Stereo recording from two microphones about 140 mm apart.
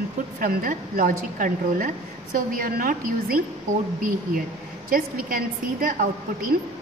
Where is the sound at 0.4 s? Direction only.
90° right.